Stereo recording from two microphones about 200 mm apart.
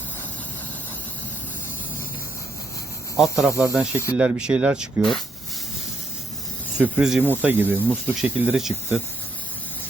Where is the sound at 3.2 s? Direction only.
Centre (ahead or behind).